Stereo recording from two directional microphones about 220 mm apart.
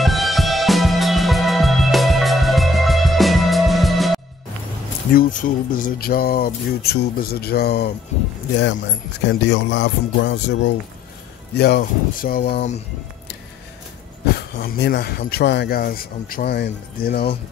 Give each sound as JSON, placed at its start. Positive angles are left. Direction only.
{"t": 0.0, "sound": "music", "side_deg": 0}
{"t": 5.1, "sound": "speech", "side_deg": 35}
{"t": 9.3, "sound": "speech", "side_deg": 55}
{"t": 14.6, "sound": "speech", "side_deg": 45}